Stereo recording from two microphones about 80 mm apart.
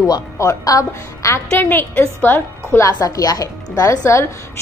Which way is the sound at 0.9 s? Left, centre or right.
Left.